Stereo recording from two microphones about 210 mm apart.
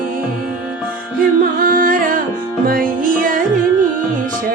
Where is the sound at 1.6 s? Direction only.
40° right (ahead or behind).